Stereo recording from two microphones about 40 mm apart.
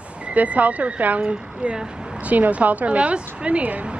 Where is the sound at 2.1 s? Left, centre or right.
Right.